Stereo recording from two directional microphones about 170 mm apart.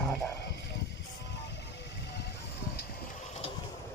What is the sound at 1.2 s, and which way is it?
Vehicle, 90° left.